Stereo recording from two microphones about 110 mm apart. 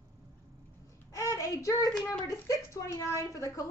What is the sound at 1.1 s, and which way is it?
Child singing, 30° left (ahead or behind).